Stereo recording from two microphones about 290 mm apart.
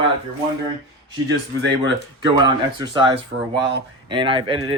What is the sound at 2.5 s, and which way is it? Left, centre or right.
Speech, centre.